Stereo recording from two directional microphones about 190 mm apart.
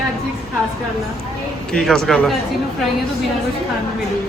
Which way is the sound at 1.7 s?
5° left (ahead or behind).